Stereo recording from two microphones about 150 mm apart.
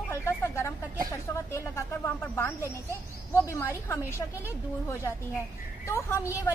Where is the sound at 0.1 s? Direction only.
15° left (ahead or behind).